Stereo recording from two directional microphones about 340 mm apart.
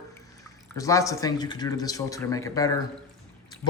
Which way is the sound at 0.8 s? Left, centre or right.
Centre.